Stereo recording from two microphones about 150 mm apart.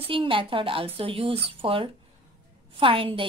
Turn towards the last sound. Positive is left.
turn(degrees=-35)  # may be behind; listen again after turning